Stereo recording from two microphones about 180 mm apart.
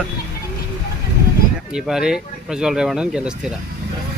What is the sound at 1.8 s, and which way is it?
Speech, 5° right (ahead or behind).